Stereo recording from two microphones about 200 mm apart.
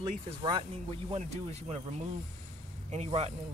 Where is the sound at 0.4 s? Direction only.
25° right (ahead or behind).